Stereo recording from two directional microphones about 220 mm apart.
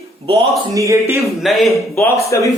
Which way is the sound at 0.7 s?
15° right (ahead or behind).